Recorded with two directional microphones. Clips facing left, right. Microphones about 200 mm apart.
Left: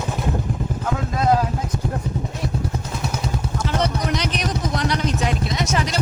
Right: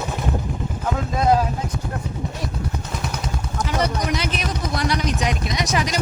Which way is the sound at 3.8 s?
10° right (ahead or behind).